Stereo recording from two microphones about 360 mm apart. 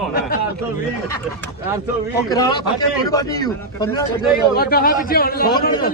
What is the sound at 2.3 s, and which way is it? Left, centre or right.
Speech, centre.